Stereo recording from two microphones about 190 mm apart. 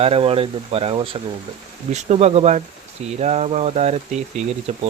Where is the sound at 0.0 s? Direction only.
30° right (ahead or behind).